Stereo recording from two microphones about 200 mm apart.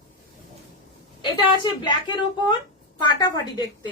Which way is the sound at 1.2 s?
25° left (ahead or behind).